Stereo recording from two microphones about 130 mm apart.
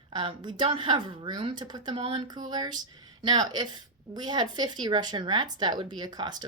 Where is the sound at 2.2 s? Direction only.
35° right (ahead or behind).